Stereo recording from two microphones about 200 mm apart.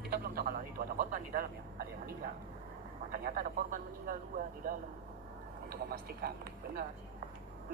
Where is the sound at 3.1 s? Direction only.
45° right (ahead or behind).